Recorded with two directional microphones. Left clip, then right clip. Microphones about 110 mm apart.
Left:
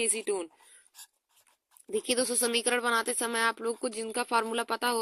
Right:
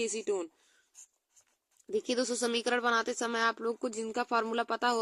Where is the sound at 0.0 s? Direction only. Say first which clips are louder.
Left 2 dB; 20° left (ahead or behind).